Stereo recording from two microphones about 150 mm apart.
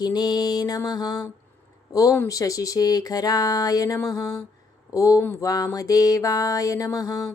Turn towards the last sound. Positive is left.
turn(degrees=25)  # may be behind; listen again after turning